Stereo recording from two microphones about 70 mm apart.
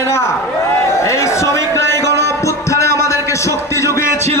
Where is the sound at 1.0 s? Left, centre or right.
Left.